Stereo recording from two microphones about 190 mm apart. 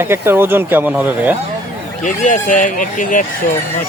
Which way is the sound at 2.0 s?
40° left (ahead or behind).